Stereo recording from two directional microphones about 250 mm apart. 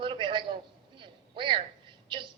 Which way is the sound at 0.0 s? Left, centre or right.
Centre.